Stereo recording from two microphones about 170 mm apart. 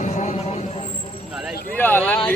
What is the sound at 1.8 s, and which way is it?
Speech, 10° left (ahead or behind).